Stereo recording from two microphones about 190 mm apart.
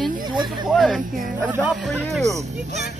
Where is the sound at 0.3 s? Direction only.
25° right (ahead or behind).